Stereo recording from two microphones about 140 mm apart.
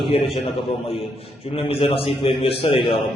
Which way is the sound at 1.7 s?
40° left (ahead or behind).